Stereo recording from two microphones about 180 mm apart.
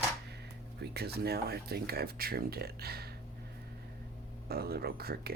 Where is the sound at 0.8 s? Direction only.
65° right (ahead or behind).